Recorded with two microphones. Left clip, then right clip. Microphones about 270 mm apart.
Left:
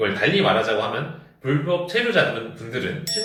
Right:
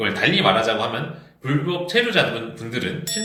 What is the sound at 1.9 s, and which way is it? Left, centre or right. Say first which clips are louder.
Speech: right 4 dB; right.